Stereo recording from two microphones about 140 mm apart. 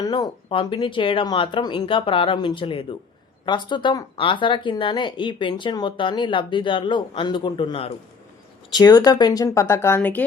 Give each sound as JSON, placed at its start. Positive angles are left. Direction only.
{"t": 0.0, "sound": "speech", "side_deg": 30}
{"t": 8.7, "sound": "speech", "side_deg": 30}